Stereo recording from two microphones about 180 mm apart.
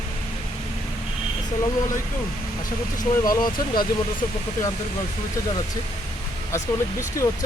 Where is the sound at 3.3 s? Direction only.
25° left (ahead or behind).